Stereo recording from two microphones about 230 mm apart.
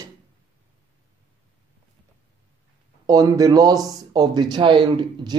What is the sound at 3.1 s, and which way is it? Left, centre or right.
Speech, centre.